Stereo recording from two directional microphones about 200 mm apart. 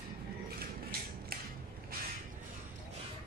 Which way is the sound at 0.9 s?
50° right (ahead or behind).